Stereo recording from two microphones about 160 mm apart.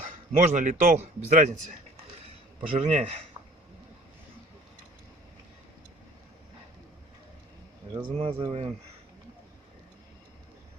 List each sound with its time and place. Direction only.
0.0 s a man's voice: 50° right (ahead or behind)
2.6 s speech: 40° right (ahead or behind)
8.1 s speech: 40° right (ahead or behind)